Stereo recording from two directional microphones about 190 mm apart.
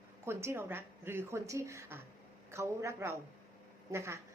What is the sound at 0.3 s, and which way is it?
Speech, 15° right (ahead or behind).